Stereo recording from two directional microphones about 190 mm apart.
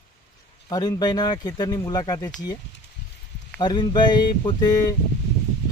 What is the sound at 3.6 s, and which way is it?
Speech, 20° left (ahead or behind).